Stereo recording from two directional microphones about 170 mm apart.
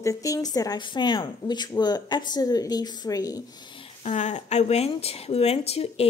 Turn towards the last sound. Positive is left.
turn(degrees=35)  # may be behind; listen again after turning